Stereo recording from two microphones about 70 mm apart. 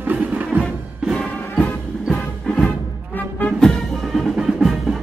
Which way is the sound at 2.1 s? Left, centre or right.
Centre.